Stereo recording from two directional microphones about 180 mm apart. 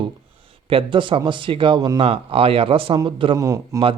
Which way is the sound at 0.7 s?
30° right (ahead or behind).